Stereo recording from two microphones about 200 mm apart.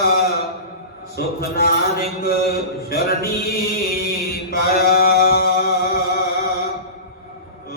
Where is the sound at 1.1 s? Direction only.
50° left (ahead or behind).